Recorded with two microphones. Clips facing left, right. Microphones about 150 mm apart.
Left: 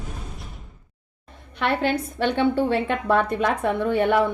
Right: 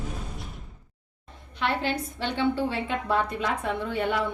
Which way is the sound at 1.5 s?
60° left (ahead or behind).